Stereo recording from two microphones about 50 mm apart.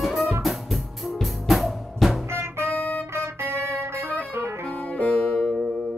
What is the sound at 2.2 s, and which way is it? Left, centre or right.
Music, right.